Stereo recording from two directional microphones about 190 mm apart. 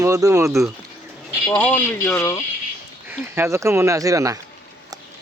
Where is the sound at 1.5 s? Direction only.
10° left (ahead or behind).